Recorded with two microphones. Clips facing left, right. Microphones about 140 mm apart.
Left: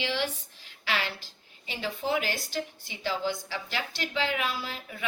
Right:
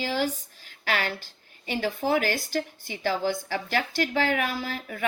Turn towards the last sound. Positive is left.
turn(degrees=-50)  # may be behind; listen again after turning